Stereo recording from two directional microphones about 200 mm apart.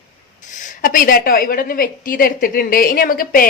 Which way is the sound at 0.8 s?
45° left (ahead or behind).